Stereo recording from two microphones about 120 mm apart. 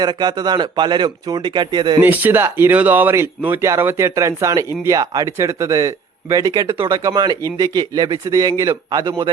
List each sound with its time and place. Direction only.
0.0 s speech: 35° right (ahead or behind)
2.0 s speech: 15° right (ahead or behind); by 9.1 s 30° right (ahead or behind)